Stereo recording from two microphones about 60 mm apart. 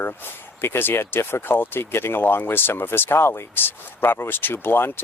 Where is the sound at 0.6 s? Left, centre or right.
Left.